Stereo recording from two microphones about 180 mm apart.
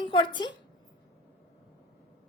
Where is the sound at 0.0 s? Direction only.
25° left (ahead or behind).